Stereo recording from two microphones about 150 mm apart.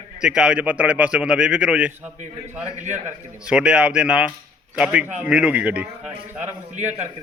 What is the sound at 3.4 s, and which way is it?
A man's voice, 5° right (ahead or behind).